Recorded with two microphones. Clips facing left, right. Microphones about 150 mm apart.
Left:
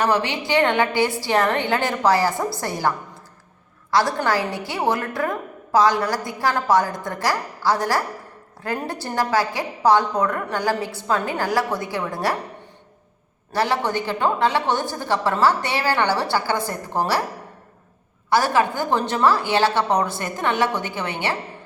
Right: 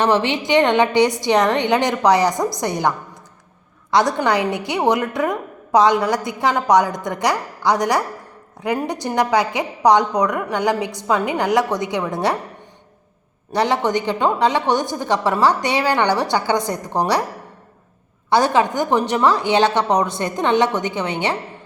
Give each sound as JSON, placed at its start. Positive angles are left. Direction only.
{"t": 0.0, "sound": "a woman's voice", "side_deg": -25}
{"t": 4.2, "sound": "a woman's voice", "side_deg": -20}
{"t": 13.5, "sound": "a woman's voice", "side_deg": -20}
{"t": 18.3, "sound": "a woman's voice", "side_deg": -20}